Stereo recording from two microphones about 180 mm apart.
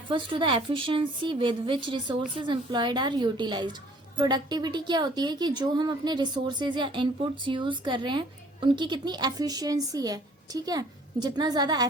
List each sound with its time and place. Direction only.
0.1 s a woman's voice: 25° right (ahead or behind)